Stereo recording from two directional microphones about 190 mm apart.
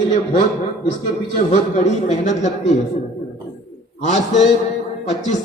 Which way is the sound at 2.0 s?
35° left (ahead or behind).